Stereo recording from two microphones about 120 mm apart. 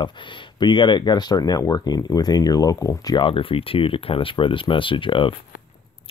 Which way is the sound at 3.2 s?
45° left (ahead or behind).